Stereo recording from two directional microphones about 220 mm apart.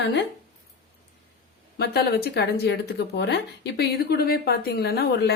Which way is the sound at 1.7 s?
45° left (ahead or behind).